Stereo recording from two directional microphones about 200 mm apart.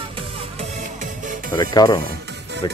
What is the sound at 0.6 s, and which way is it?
Music, 40° right (ahead or behind).